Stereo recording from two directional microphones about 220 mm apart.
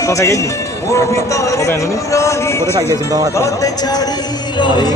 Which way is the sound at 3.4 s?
15° left (ahead or behind).